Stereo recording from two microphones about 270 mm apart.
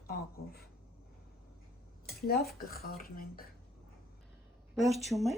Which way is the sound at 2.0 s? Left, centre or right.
Left.